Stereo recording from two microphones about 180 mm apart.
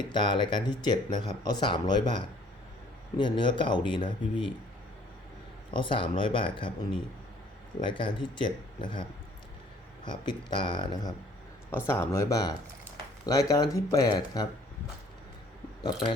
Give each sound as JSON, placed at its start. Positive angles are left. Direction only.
{"t": 0.1, "sound": "speech", "side_deg": 25}
{"t": 5.7, "sound": "speech", "side_deg": 30}
{"t": 10.1, "sound": "speech", "side_deg": 25}
{"t": 11.9, "sound": "speech", "side_deg": 15}